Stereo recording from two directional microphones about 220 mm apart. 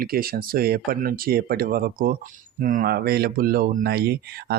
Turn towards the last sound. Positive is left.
turn(degrees=-45)  # may be behind; listen again after turning